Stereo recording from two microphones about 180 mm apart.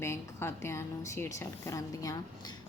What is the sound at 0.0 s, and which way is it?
A woman's voice, 15° left (ahead or behind).